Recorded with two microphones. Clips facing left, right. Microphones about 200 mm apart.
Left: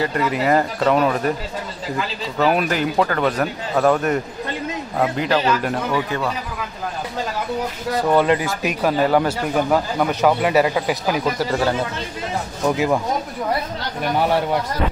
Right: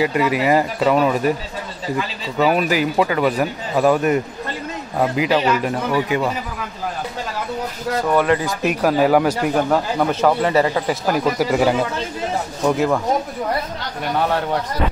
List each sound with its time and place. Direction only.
0.0 s speech: 10° right (ahead or behind)
2.3 s speech: 5° right (ahead or behind)
8.1 s speech: 20° left (ahead or behind)
8.6 s speech: 5° right (ahead or behind)
9.7 s speech: 5° left (ahead or behind)
11.3 s speech: 10° right (ahead or behind)
12.6 s speech: 5° left (ahead or behind)
14.1 s speech: 10° left (ahead or behind)